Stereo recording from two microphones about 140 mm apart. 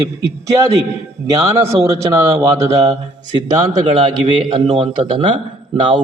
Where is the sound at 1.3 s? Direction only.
20° right (ahead or behind).